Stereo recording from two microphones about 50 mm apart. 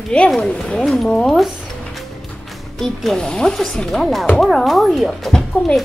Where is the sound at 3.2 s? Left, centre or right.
Centre.